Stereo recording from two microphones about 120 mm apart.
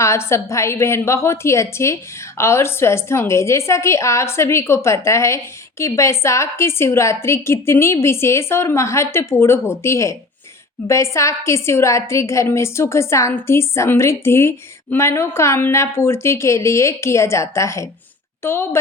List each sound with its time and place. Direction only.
0.0 s a woman's voice: 25° left (ahead or behind)